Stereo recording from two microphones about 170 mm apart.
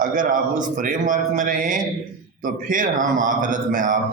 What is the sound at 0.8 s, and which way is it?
A man's voice, 50° right (ahead or behind).